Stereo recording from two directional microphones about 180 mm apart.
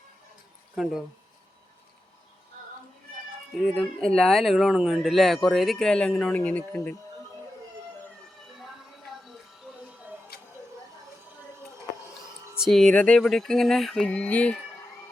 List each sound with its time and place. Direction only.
0.8 s speech: centre (ahead or behind)
3.6 s speech: 5° left (ahead or behind)
9.7 s music: 5° right (ahead or behind)
10.3 s tick-tock: 60° left (ahead or behind)
12.5 s speech: centre (ahead or behind)